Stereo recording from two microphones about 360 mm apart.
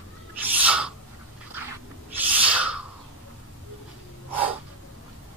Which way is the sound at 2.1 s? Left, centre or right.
Centre.